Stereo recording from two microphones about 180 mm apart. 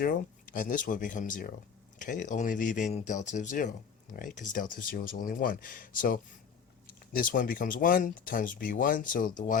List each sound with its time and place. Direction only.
0.0 s speech: 50° left (ahead or behind)